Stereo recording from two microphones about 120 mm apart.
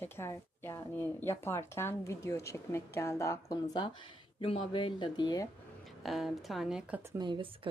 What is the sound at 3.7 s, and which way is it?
Speech, 40° left (ahead or behind).